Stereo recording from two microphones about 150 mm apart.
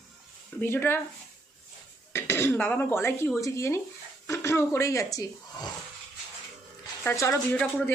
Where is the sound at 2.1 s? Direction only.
15° left (ahead or behind).